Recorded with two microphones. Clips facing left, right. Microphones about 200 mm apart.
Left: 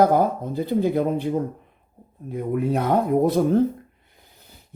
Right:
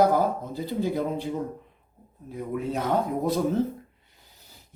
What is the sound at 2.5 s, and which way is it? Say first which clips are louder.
Speech: left 5 dB; 55° left (ahead or behind).